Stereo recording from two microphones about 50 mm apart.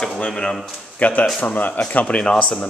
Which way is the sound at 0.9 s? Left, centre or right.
Left.